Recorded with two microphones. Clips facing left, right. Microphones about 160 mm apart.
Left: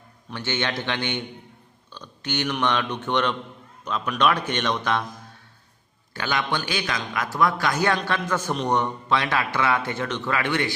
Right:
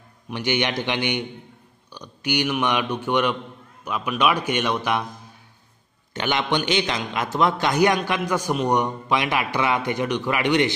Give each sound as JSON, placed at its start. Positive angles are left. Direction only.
{"t": 0.3, "sound": "a man's voice", "side_deg": -15}
{"t": 6.1, "sound": "a man's voice", "side_deg": -20}